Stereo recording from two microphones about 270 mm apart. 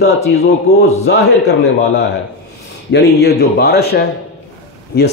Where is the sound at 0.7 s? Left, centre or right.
Left.